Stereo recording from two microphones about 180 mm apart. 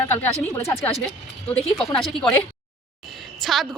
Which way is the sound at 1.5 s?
5° left (ahead or behind).